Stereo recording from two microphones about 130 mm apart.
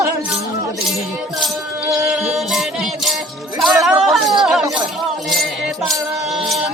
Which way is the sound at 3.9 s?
Centre (ahead or behind).